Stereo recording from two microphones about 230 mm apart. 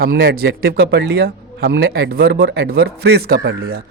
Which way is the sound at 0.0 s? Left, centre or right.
Right.